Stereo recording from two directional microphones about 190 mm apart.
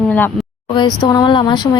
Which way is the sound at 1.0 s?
20° left (ahead or behind).